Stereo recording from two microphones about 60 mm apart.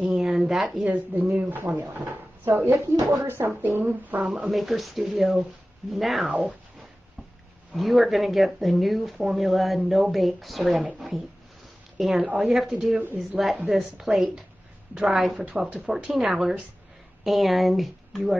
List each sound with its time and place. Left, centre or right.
0.1 s a sound: centre
0.7 s speech: right
1.8 s speech: right
2.7 s speech: right
3.3 s speech: right
3.8 s speech: right
4.3 s speech: centre
6.2 s speech: centre
7.7 s a woman's voice: centre